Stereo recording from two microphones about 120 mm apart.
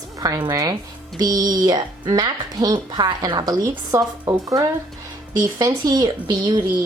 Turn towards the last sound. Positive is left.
turn(degrees=-35)  # may be behind; listen again after turning